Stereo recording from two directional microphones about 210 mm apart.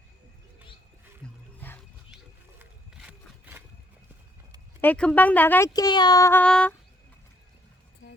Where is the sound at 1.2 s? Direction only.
5° left (ahead or behind).